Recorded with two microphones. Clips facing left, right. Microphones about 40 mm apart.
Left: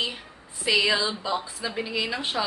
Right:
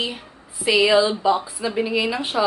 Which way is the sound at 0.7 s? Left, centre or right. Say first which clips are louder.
Right 7 dB; centre.